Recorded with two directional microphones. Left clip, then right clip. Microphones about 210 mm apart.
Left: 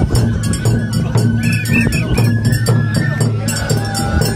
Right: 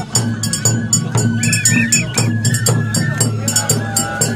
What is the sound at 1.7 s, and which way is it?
Music, 35° right (ahead or behind).